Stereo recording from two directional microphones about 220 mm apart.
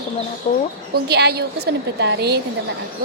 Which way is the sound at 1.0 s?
50° right (ahead or behind).